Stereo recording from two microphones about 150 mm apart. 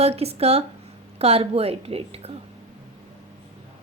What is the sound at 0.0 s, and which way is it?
A woman's voice, 45° right (ahead or behind).